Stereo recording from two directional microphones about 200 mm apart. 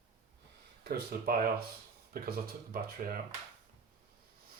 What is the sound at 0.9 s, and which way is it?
Speech, 50° right (ahead or behind).